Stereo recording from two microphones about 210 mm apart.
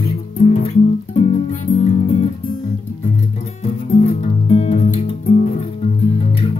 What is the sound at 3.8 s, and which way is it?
Music, 30° left (ahead or behind).